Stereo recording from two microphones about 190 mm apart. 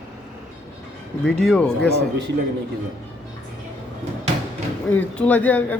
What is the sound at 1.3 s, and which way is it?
Speech, 5° left (ahead or behind).